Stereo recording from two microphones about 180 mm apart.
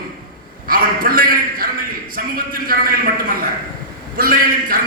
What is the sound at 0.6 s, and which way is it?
A man's voice, 55° right (ahead or behind).